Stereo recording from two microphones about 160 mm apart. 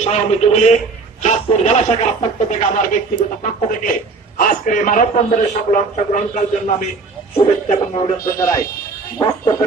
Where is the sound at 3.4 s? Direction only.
55° left (ahead or behind).